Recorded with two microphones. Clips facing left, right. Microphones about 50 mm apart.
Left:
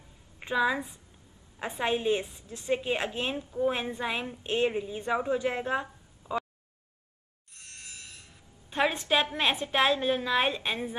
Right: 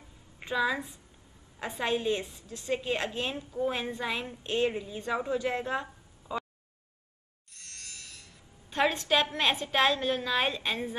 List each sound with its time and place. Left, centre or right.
0.5 s a woman's voice: centre
7.5 s a sound: left
8.6 s a woman's voice: centre